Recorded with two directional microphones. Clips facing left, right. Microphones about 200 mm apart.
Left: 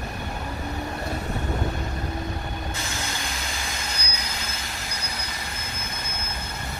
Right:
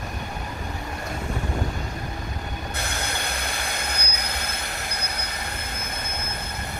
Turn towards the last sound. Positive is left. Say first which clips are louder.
# right 3 dB
turn(degrees=-60)  # may be behind; listen again after turning